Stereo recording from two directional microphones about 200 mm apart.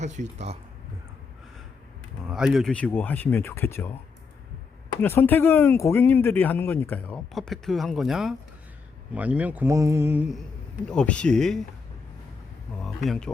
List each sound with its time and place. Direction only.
0.0 s speech: 35° right (ahead or behind)
2.2 s speech: 5° right (ahead or behind)
5.0 s speech: 10° left (ahead or behind); by 10.4 s 5° right (ahead or behind)
10.8 s speech: 5° left (ahead or behind)
12.8 s speech: centre (ahead or behind)